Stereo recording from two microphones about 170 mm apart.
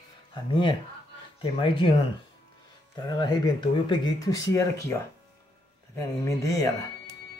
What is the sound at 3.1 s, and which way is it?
Speech, 25° left (ahead or behind).